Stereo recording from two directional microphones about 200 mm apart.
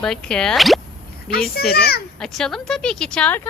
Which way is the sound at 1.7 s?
50° left (ahead or behind).